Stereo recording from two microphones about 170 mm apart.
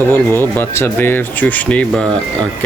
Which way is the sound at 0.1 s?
10° left (ahead or behind).